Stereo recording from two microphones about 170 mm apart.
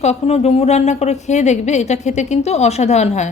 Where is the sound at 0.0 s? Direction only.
40° left (ahead or behind).